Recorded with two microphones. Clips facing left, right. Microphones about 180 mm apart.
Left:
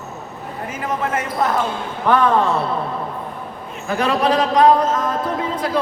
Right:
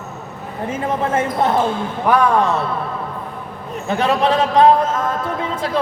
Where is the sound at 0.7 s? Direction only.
30° right (ahead or behind).